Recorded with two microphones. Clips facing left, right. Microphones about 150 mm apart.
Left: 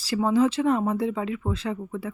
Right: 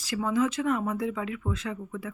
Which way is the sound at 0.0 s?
35° left (ahead or behind).